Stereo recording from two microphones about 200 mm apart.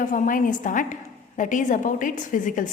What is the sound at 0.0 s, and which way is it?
A woman's voice, 40° left (ahead or behind).